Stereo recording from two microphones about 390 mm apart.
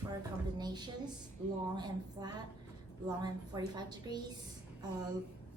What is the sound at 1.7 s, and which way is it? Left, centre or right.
A woman's voice, centre.